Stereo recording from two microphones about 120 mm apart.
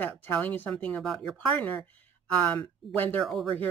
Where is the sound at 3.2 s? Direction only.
Centre (ahead or behind).